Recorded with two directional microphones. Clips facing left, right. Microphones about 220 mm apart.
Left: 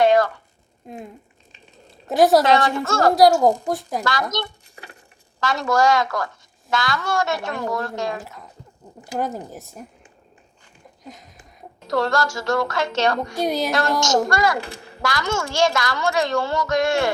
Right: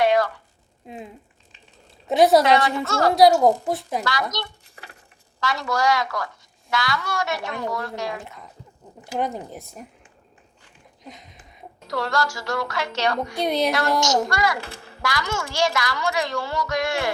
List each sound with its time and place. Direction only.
0.0 s a sound: 50° left (ahead or behind)
0.9 s speech: centre (ahead or behind)
2.6 s a woman's voice: 50° left (ahead or behind)
3.4 s speech: centre (ahead or behind)
4.0 s a woman's voice: 50° left (ahead or behind)
9.1 s speech: centre (ahead or behind)
11.0 s a sound: centre (ahead or behind)
11.9 s a woman's voice: 50° left (ahead or behind)
13.4 s speech: centre (ahead or behind)
13.7 s a woman's voice: 50° left (ahead or behind)